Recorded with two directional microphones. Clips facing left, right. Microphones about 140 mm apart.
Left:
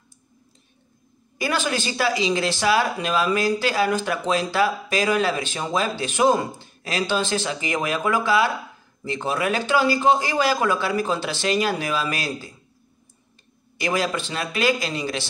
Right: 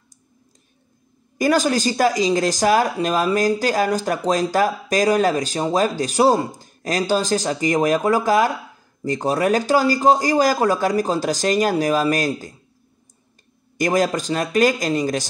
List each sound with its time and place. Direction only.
1.4 s speech: 40° right (ahead or behind)
13.7 s speech: 45° right (ahead or behind)